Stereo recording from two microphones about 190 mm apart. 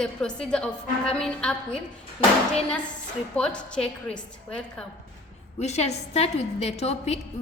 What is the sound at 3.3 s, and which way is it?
A woman's voice, 5° left (ahead or behind).